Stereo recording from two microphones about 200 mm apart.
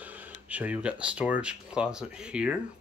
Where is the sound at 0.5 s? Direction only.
5° right (ahead or behind).